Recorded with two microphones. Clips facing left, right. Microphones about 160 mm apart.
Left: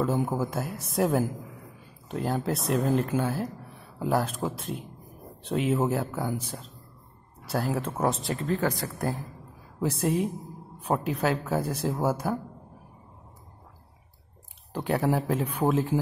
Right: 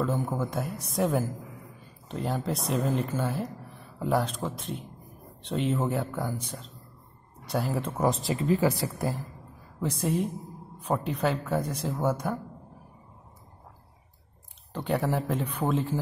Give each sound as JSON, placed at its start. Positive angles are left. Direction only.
{"t": 0.0, "sound": "speech", "side_deg": 5}
{"t": 14.7, "sound": "speech", "side_deg": 5}